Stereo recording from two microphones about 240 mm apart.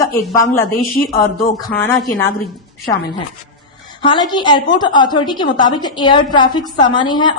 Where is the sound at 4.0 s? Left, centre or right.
Centre.